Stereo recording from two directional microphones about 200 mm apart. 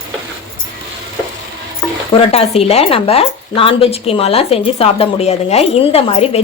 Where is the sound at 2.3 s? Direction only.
30° left (ahead or behind).